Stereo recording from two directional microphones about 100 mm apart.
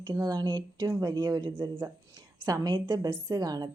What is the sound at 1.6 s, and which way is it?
Speech, 25° right (ahead or behind).